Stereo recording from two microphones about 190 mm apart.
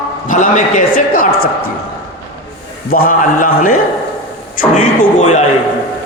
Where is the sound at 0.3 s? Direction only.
40° left (ahead or behind).